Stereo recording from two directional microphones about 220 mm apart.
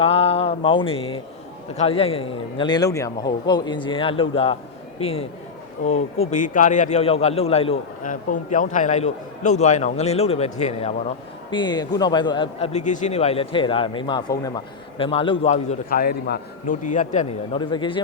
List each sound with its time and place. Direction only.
0.0 s mantra: 25° left (ahead or behind)
1.7 s a man's voice: 30° left (ahead or behind)
11.5 s a man's voice: 20° left (ahead or behind)
17.6 s a man's voice: 20° left (ahead or behind)